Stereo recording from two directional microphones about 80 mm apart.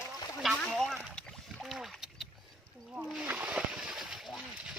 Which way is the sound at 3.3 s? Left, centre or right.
Right.